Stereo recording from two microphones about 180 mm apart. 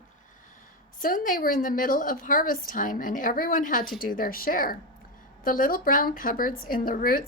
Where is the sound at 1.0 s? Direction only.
50° left (ahead or behind).